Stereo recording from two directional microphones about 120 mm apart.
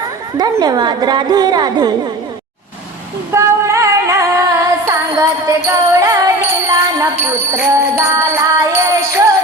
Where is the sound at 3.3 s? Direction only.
25° right (ahead or behind).